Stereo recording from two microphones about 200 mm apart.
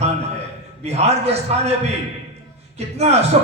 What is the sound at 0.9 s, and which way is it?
Speech, 30° right (ahead or behind).